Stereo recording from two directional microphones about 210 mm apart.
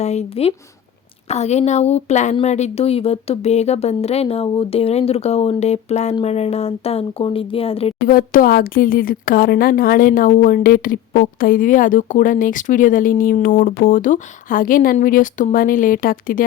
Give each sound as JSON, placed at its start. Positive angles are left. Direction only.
{"t": 0.0, "sound": "speech", "side_deg": 30}
{"t": 8.0, "sound": "speech", "side_deg": 45}